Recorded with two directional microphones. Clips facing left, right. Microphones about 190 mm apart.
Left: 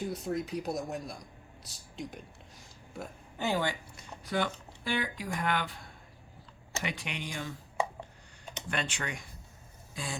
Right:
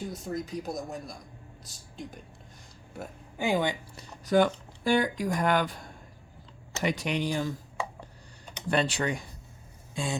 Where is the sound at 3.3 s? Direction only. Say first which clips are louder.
Right 4 dB; 15° right (ahead or behind).